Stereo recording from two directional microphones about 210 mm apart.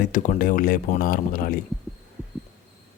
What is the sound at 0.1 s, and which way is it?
A man's voice, 35° left (ahead or behind).